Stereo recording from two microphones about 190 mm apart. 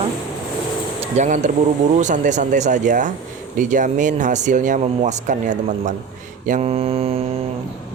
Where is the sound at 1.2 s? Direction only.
40° right (ahead or behind).